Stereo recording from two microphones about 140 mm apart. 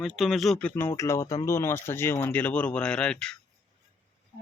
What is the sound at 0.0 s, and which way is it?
Speech, centre (ahead or behind).